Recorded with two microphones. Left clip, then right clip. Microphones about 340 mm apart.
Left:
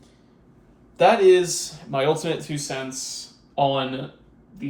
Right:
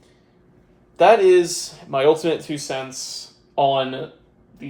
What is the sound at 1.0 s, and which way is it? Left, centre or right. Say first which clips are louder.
Speech: right 3 dB; right.